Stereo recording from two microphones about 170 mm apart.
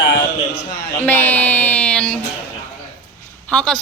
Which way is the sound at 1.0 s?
10° left (ahead or behind).